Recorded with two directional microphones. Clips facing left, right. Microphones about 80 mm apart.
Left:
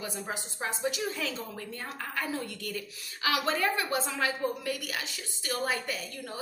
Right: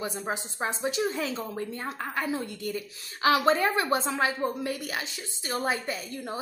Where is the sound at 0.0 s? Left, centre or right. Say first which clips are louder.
Right 4 dB; right.